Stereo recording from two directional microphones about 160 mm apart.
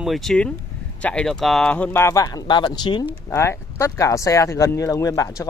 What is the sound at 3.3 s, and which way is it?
Speech, 15° left (ahead or behind).